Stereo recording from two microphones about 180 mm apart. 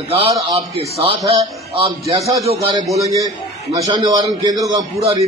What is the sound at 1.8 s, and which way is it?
A man's voice, 20° right (ahead or behind).